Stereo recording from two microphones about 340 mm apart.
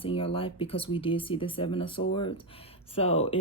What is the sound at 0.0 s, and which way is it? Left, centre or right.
Speech, centre.